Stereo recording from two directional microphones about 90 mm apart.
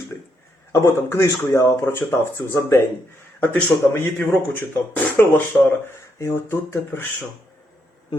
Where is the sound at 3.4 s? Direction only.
20° left (ahead or behind).